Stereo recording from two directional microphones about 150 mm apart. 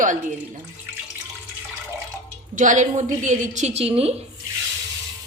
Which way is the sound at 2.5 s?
55° right (ahead or behind).